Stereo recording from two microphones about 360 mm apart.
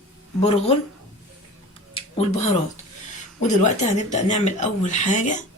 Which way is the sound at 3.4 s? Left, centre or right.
Centre.